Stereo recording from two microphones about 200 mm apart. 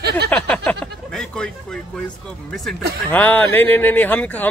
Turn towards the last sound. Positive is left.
turn(degrees=10)  # may be behind; listen again after turning